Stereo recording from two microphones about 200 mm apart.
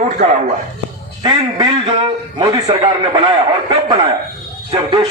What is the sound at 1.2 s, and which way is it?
A man's voice, 20° right (ahead or behind).